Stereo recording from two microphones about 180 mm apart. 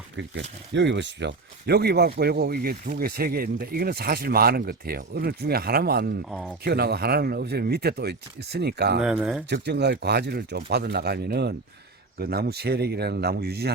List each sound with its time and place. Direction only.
0.7 s speech: 85° right; by 9.0 s 65° right (ahead or behind)
9.0 s speech: 5° right (ahead or behind)
9.5 s speech: 70° right (ahead or behind)